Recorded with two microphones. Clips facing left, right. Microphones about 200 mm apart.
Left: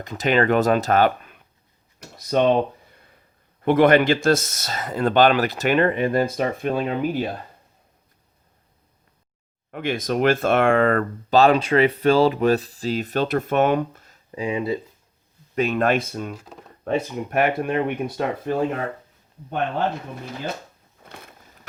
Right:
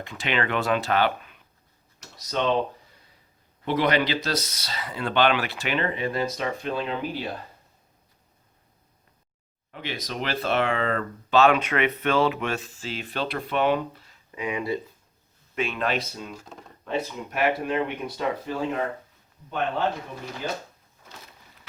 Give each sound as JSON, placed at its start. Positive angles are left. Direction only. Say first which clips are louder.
{"t": 0.0, "sound": "speech", "louder": "left 8 dB", "side_deg": 40}
{"t": 3.6, "sound": "speech", "louder": "left 8 dB", "side_deg": 50}
{"t": 9.7, "sound": "speech", "louder": "left 9 dB", "side_deg": 50}
{"t": 11.3, "sound": "speech", "louder": "left 4 dB", "side_deg": 35}
{"t": 15.5, "sound": "speech", "louder": "left 7 dB", "side_deg": 45}
{"t": 21.0, "sound": "a sound", "louder": "left 5 dB", "side_deg": 55}